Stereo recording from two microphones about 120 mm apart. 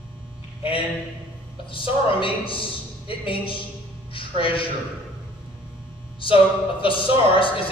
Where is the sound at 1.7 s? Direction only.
45° left (ahead or behind).